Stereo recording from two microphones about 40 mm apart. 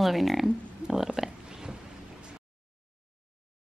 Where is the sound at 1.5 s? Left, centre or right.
Centre.